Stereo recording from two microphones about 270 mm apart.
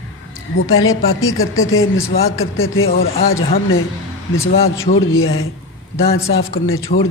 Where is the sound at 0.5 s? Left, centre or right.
Left.